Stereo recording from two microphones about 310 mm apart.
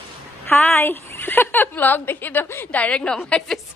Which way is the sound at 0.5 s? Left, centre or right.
Centre.